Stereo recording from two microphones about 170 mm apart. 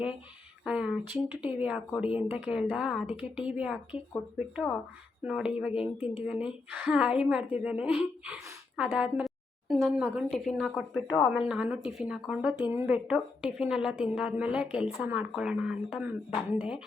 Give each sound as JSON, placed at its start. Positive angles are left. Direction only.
{"t": 0.6, "sound": "a woman's voice", "side_deg": -5}